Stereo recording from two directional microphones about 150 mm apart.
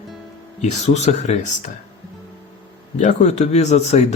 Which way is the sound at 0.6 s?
50° left (ahead or behind).